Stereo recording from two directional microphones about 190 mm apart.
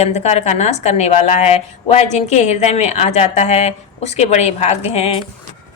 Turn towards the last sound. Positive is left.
turn(degrees=35)  # may be behind; listen again after turning